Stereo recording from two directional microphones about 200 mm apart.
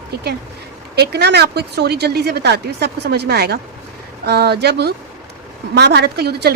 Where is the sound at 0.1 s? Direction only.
50° right (ahead or behind).